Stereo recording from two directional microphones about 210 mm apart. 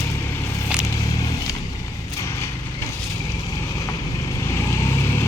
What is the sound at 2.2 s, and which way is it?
Horse, 15° left (ahead or behind).